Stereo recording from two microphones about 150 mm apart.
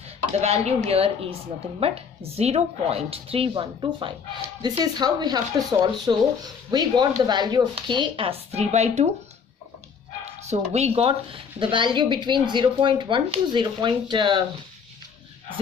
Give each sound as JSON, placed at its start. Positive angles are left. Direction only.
{"t": 0.4, "sound": "a woman's voice", "side_deg": -45}
{"t": 10.5, "sound": "speech", "side_deg": -45}